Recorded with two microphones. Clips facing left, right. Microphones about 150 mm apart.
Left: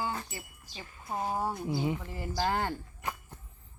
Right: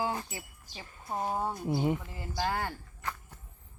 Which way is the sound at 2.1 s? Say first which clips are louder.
Left 2 dB; 20° left (ahead or behind).